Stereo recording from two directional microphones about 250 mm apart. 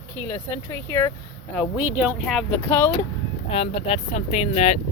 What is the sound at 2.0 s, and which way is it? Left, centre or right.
Speech, centre.